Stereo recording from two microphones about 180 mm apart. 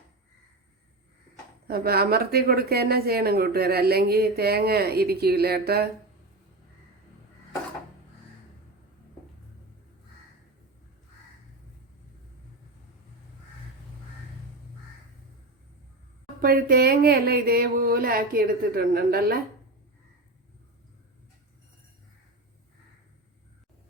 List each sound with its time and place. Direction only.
1.6 s speech: 60° right (ahead or behind)
16.4 s speech: 55° right (ahead or behind)